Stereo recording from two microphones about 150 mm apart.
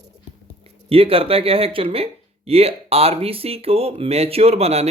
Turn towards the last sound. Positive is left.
turn(degrees=-45)  # may be behind; listen again after turning